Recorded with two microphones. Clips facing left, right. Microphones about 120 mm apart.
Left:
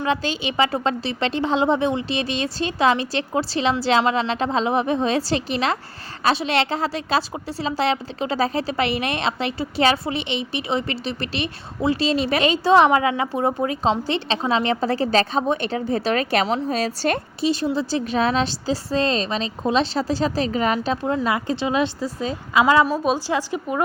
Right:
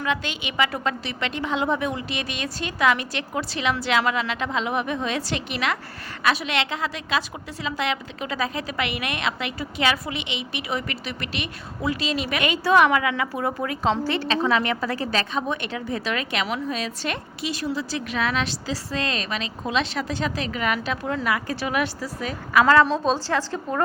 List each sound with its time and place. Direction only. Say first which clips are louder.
0.0 s a woman's voice: left 4 dB; 30° left (ahead or behind)
22.6 s a woman's voice: left 1 dB; 10° left (ahead or behind)